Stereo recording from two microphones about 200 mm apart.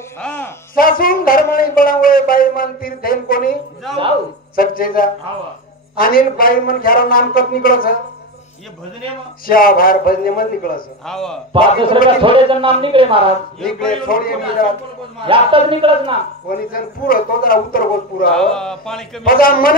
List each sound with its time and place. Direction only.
0.2 s speech: 10° left (ahead or behind)
0.7 s speech: 45° left (ahead or behind)
4.6 s speech: 45° left (ahead or behind)
9.5 s speech: 45° left (ahead or behind)
11.1 s speech: centre (ahead or behind)
11.5 s speech: 25° right (ahead or behind)
13.6 s speech: 5° left (ahead or behind)
14.0 s speech: 45° left (ahead or behind)
15.2 s speech: 25° right (ahead or behind)
16.4 s speech: 45° left (ahead or behind)
18.3 s speech: 5° left (ahead or behind)
19.2 s speech: 45° left (ahead or behind)